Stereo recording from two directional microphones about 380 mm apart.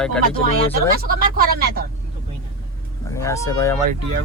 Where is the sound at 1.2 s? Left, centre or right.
Right.